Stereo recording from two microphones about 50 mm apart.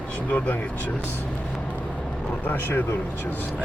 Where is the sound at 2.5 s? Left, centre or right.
Left.